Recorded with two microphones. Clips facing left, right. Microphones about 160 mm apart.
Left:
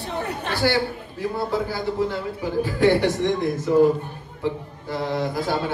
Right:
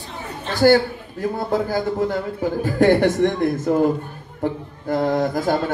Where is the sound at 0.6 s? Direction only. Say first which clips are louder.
Right 8 dB; 45° right (ahead or behind).